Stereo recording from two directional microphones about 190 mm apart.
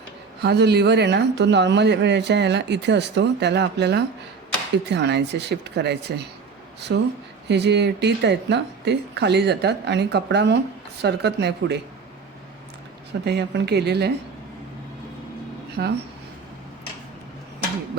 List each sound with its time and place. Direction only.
0.4 s speech: 60° right (ahead or behind)
6.9 s speech: 70° right (ahead or behind)
13.2 s speech: 60° right (ahead or behind)
15.8 s speech: 55° right (ahead or behind)